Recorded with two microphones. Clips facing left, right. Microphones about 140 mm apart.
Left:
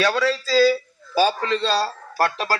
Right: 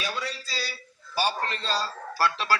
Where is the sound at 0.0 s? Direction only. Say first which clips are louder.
Left 13 dB; 90° left.